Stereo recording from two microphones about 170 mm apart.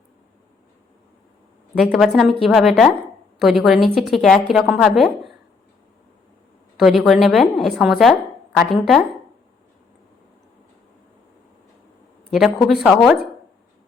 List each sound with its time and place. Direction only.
1.8 s a woman's voice: centre (ahead or behind)
6.7 s a woman's voice: centre (ahead or behind)
12.3 s a woman's voice: centre (ahead or behind)